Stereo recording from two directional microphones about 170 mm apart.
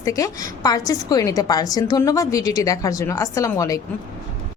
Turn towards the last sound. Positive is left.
turn(degrees=20)  # may be behind; listen again after turning